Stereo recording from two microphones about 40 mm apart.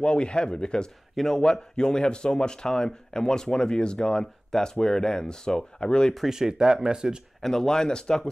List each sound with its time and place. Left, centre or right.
0.0 s speech: left
6.2 s speech: centre
7.4 s speech: centre